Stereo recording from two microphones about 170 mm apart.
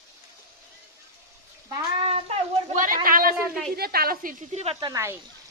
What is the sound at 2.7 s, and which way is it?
A woman's voice, 55° right (ahead or behind).